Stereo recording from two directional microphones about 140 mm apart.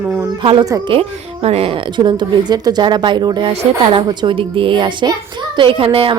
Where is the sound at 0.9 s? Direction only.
40° right (ahead or behind).